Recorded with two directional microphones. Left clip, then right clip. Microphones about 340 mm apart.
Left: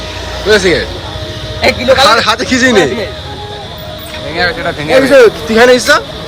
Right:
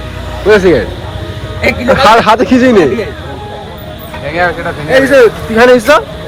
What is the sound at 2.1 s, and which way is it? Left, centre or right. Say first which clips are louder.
Speech: right 3 dB; centre.